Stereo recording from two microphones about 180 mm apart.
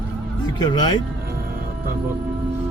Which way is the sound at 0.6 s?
25° left (ahead or behind).